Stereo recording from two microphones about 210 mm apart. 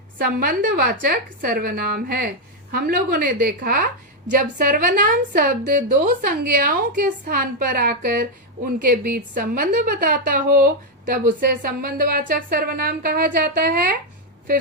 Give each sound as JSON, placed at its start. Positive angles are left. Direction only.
{"t": 0.2, "sound": "a woman's voice", "side_deg": -45}